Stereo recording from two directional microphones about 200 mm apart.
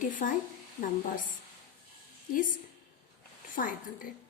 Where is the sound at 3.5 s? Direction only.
40° left (ahead or behind).